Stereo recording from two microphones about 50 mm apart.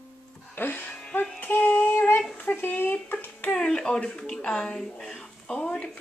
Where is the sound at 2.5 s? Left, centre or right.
Left.